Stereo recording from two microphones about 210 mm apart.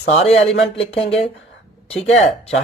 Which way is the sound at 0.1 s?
30° left (ahead or behind).